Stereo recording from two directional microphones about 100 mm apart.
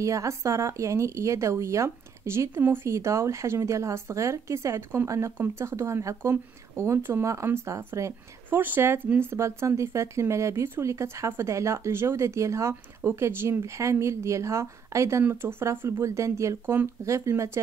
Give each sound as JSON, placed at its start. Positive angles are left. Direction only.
{"t": 0.0, "sound": "speech", "side_deg": -30}